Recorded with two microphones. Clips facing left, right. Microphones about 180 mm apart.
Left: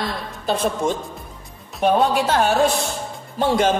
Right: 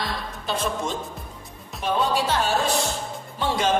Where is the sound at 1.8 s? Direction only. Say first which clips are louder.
Left 6 dB; 60° left (ahead or behind).